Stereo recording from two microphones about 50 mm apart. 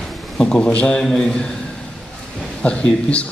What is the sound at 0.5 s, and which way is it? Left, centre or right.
Speech, left.